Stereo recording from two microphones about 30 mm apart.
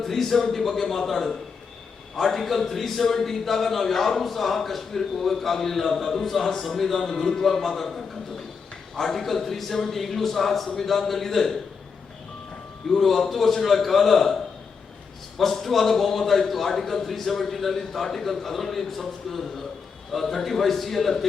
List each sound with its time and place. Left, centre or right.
0.0 s speech: centre
9.0 s speech: centre
13.0 s a man's voice: centre
15.4 s a man's voice: centre